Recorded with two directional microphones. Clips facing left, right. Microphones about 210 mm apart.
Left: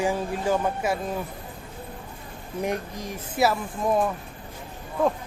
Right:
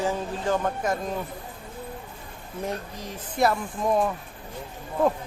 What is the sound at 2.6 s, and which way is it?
Speech, 15° left (ahead or behind).